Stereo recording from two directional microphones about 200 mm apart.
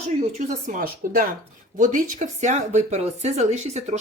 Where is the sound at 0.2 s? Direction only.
35° right (ahead or behind).